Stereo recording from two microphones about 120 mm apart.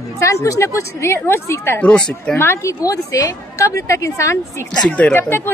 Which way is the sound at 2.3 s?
20° left (ahead or behind).